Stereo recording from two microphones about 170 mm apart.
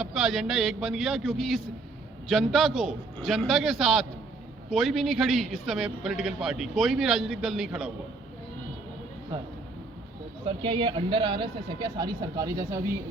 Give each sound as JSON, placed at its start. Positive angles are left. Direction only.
{"t": 0.0, "sound": "a man's voice", "side_deg": 0}
{"t": 10.4, "sound": "speech", "side_deg": -30}